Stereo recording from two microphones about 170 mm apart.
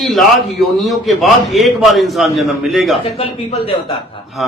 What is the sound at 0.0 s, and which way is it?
A man's voice, centre (ahead or behind).